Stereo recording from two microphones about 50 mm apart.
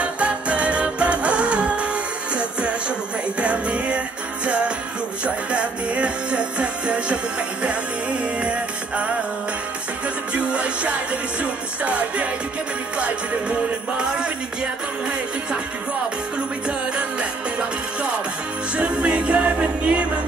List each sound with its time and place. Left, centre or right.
0.0 s music: right
3.3 s music: right
10.3 s music: right
16.6 s music: right